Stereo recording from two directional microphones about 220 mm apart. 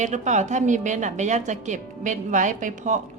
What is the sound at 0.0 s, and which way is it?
A woman's voice, 35° right (ahead or behind).